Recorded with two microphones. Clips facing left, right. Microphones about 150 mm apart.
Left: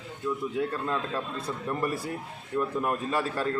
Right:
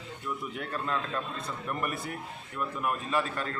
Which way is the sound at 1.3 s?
30° left (ahead or behind).